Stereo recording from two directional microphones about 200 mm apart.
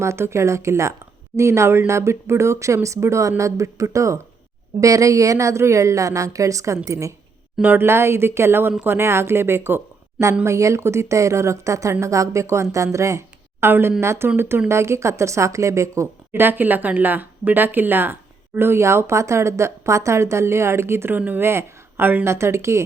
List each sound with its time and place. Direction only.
0.0 s speech: 15° right (ahead or behind)